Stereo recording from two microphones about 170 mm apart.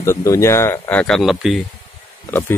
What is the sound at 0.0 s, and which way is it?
Speech, 15° left (ahead or behind).